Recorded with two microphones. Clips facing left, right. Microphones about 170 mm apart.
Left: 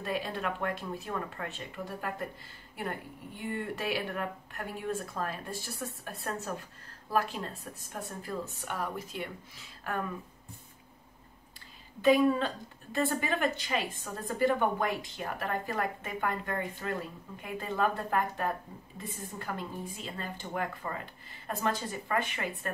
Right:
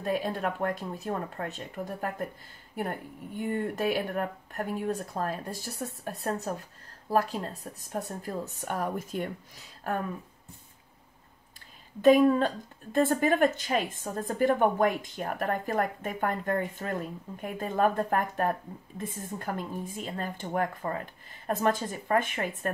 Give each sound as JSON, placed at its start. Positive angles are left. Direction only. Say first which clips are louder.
{"t": 0.0, "sound": "a woman's voice", "louder": "right 4 dB", "side_deg": -40}
{"t": 12.0, "sound": "a woman's voice", "louder": "right 4 dB", "side_deg": -45}